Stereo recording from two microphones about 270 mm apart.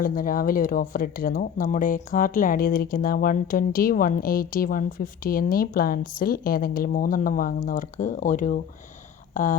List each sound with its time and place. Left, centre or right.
0.0 s speech: left